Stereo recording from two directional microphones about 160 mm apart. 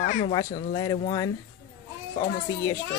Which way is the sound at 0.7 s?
25° left (ahead or behind).